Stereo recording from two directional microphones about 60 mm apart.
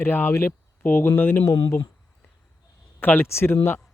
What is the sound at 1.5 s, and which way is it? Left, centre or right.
Speech, left.